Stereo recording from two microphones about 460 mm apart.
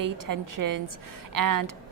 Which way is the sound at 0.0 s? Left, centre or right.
Right.